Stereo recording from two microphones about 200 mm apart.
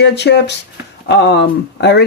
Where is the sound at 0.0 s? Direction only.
60° left (ahead or behind).